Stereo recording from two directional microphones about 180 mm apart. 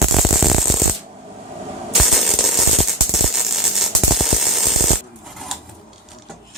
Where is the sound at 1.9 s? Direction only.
Centre (ahead or behind).